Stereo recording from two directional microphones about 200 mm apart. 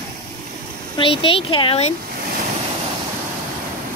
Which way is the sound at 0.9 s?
25° left (ahead or behind).